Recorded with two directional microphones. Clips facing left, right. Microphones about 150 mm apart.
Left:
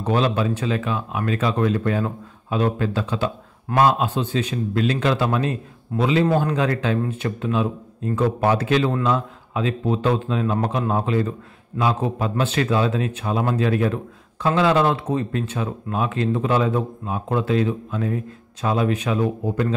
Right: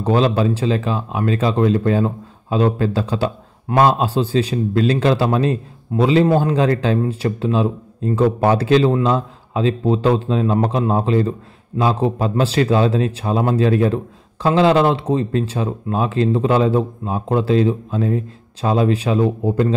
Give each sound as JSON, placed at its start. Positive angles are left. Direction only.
{"t": 0.0, "sound": "speech", "side_deg": -30}